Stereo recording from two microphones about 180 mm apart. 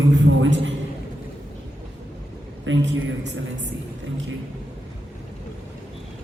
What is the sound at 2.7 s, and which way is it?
Speech, 90° right.